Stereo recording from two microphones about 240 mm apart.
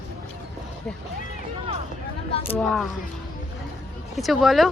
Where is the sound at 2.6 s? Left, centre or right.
Centre.